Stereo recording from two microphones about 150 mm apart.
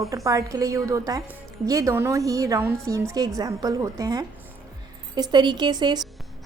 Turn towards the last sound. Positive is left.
turn(degrees=-30)  # may be behind; listen again after turning